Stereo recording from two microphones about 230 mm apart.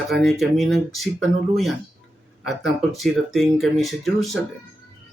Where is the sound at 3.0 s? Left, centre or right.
Centre.